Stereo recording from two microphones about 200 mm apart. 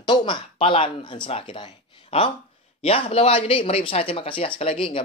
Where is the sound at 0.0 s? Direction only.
25° left (ahead or behind).